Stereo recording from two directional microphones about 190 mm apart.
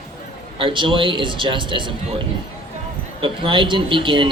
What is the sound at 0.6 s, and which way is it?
Speech, 25° right (ahead or behind).